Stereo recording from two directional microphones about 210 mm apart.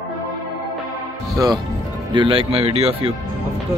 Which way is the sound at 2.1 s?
25° right (ahead or behind).